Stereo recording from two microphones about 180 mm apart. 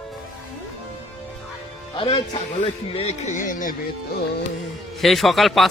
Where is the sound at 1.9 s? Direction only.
25° left (ahead or behind); by 3.8 s 50° left (ahead or behind).